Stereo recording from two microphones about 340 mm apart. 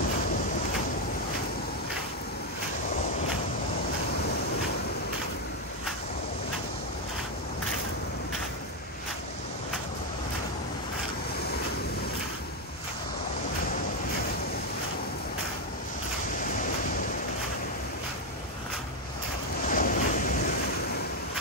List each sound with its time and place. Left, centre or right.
19.7 s waves: left